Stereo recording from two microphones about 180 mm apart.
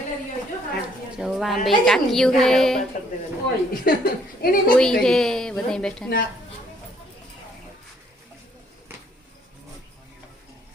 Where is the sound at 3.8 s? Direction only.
55° left (ahead or behind).